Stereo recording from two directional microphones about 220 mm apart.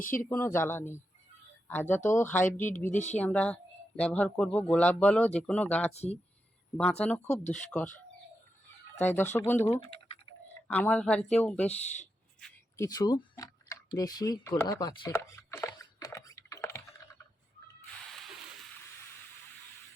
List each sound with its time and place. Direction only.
0.0 s speech: 40° left (ahead or behind)
0.3 s speech: 10° left (ahead or behind)
2.9 s speech: 35° left (ahead or behind)
3.2 s speech: 5° left (ahead or behind)
5.9 s speech: 30° left (ahead or behind)
7.3 s speech: 35° left (ahead or behind)
9.0 s speech: 10° left (ahead or behind)
12.7 s tick-tock: 15° left (ahead or behind)